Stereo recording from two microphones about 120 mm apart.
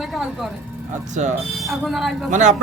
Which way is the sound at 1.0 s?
90° right.